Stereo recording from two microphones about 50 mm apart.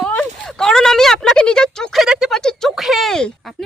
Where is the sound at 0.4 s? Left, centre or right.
Centre.